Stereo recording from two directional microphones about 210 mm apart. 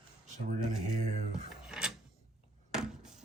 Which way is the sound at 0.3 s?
35° right (ahead or behind).